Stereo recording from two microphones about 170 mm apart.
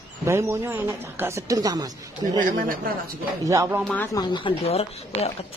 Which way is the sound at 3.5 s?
15° right (ahead or behind).